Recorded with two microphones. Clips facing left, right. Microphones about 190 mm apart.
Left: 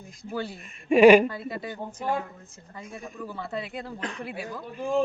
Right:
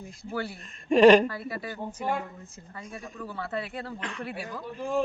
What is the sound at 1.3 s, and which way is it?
Speech, 20° left (ahead or behind).